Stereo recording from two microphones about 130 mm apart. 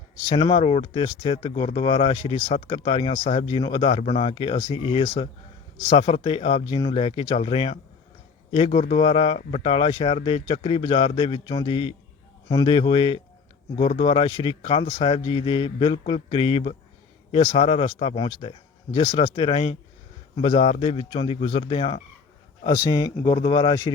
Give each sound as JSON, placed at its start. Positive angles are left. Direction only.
{"t": 0.3, "sound": "speech", "side_deg": 35}